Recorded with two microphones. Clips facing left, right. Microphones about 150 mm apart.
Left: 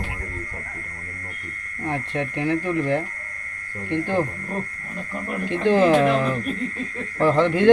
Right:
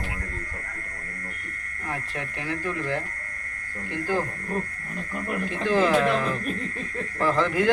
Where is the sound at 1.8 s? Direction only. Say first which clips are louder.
Left 7 dB; 25° left (ahead or behind).